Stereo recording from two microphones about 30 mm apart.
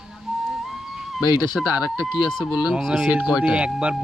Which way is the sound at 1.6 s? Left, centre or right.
Right.